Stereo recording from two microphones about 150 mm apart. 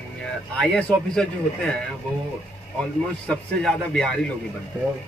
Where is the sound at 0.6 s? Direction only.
5° left (ahead or behind).